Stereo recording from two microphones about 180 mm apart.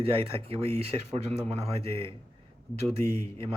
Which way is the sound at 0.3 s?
30° right (ahead or behind).